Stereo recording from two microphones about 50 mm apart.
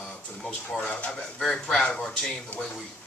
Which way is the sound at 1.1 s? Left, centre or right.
Centre.